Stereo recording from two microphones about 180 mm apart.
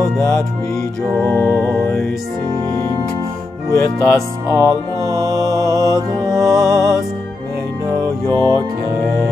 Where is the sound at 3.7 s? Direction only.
20° left (ahead or behind).